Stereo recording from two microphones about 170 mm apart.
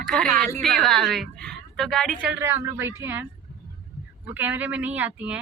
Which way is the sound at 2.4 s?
15° right (ahead or behind).